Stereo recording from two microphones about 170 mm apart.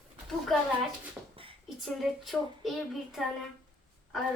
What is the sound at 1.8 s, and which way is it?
Speech, centre (ahead or behind).